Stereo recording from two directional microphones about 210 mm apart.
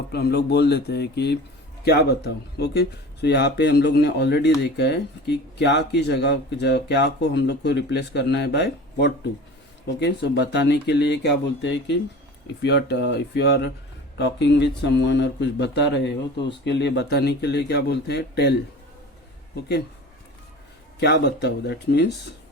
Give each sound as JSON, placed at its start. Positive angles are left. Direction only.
{"t": 0.1, "sound": "speech", "side_deg": 50}
{"t": 21.0, "sound": "speech", "side_deg": 55}